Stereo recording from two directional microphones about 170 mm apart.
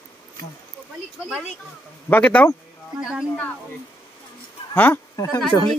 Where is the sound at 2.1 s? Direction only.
10° left (ahead or behind).